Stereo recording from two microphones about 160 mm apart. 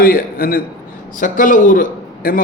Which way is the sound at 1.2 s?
55° left (ahead or behind).